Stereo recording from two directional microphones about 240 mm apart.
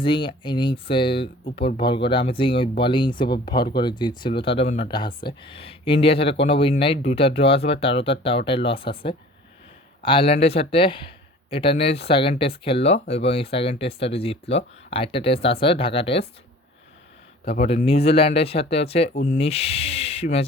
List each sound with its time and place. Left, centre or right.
0.0 s speech: left
17.6 s speech: left